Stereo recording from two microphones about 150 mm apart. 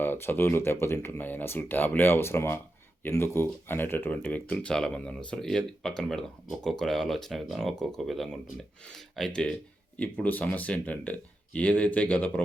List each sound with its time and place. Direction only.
0.0 s speech: 15° left (ahead or behind)